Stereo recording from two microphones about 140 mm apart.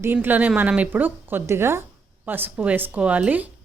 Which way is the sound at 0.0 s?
15° right (ahead or behind).